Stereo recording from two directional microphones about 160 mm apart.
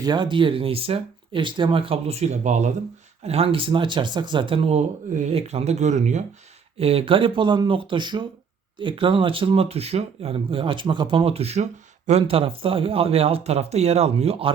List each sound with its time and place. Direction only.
0.0 s speech: 30° right (ahead or behind); by 2.7 s 45° right (ahead or behind)
3.2 s speech: 35° right (ahead or behind)